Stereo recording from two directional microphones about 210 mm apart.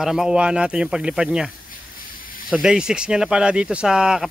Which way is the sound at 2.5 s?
5° right (ahead or behind).